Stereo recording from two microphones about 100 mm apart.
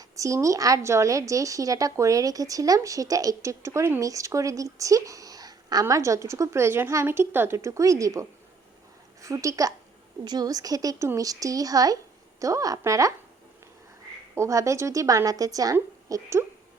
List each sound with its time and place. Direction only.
0.0 s a woman's voice: 30° right (ahead or behind)
5.8 s speech: 30° right (ahead or behind)
9.2 s a woman's voice: 30° right (ahead or behind)
14.3 s a woman's voice: 30° right (ahead or behind)